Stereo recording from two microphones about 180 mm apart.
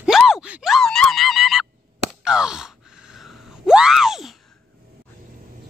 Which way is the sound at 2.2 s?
5° right (ahead or behind).